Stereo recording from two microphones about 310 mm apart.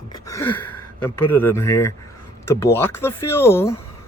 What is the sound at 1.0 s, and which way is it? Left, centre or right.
Speech, centre.